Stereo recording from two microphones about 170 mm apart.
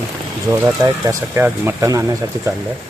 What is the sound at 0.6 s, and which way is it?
Speech, 15° right (ahead or behind).